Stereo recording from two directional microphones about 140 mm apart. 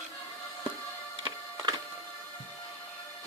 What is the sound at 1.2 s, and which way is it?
Printer, 30° right (ahead or behind).